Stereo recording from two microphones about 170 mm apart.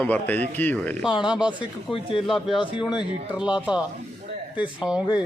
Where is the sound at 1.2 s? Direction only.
5° right (ahead or behind).